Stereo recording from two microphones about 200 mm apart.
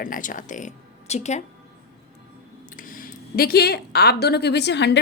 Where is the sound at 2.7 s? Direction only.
45° left (ahead or behind).